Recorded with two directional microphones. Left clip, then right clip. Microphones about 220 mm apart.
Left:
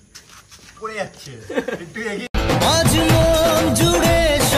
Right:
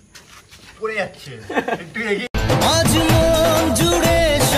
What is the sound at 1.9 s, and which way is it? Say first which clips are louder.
Speech: right 4 dB; 10° left (ahead or behind).